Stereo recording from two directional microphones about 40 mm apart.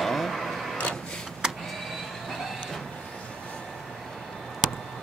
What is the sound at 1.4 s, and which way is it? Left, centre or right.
Vehicle, centre.